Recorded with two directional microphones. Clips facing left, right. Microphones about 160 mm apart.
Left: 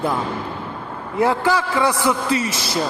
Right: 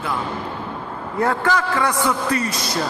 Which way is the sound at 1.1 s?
25° left (ahead or behind).